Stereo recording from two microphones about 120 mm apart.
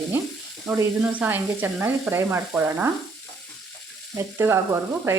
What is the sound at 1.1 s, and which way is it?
Sizzle, 15° right (ahead or behind).